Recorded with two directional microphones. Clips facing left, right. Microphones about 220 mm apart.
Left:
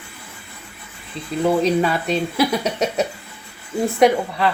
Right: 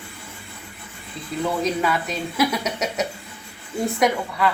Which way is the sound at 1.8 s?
30° left (ahead or behind).